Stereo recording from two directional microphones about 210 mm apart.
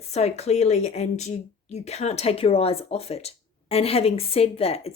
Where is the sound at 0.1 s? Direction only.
30° left (ahead or behind).